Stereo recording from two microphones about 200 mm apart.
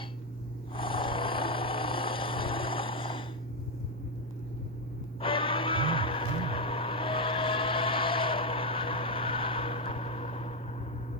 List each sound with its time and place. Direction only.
0.7 s vehicle: 25° left (ahead or behind)
5.2 s music: 25° left (ahead or behind)